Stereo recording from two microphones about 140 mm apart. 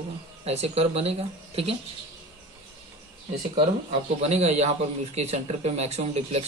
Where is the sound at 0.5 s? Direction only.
45° right (ahead or behind).